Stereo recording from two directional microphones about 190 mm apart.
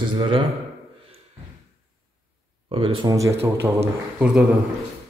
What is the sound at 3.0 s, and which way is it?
Speech, 20° right (ahead or behind).